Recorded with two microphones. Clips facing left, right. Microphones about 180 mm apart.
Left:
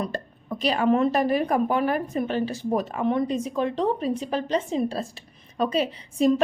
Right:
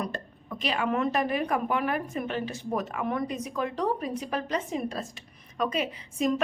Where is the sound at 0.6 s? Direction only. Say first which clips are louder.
Left 6 dB; 35° left (ahead or behind).